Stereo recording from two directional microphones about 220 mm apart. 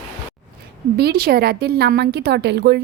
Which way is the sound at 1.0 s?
45° right (ahead or behind).